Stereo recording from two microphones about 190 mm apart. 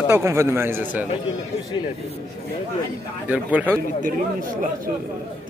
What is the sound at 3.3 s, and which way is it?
Speech, 10° right (ahead or behind).